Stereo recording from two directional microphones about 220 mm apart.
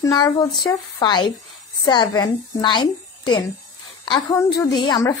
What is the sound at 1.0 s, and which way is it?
A woman's voice, 20° left (ahead or behind).